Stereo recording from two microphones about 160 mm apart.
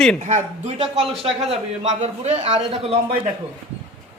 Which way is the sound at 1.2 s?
45° right (ahead or behind).